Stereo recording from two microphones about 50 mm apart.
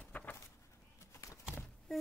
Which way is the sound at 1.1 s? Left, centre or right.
Left.